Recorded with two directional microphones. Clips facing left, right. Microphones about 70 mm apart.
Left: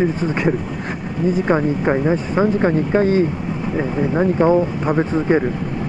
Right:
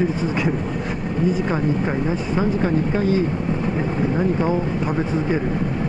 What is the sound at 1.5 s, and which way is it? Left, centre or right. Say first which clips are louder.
Speech: left 5 dB; left.